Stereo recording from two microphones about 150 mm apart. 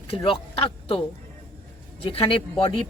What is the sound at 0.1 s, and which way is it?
Speech, 35° left (ahead or behind).